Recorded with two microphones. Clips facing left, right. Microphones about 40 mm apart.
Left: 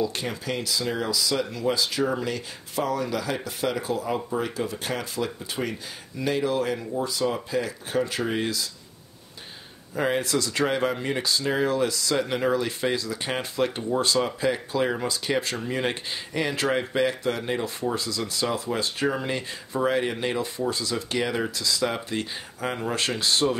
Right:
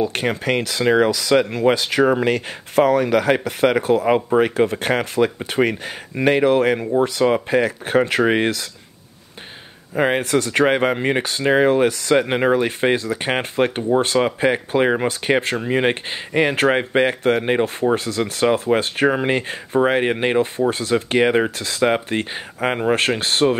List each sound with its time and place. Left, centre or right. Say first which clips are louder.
0.0 s speech: right 7 dB; right
9.9 s speech: right 7 dB; right